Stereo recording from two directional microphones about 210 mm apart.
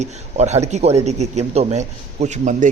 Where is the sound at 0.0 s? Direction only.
30° right (ahead or behind).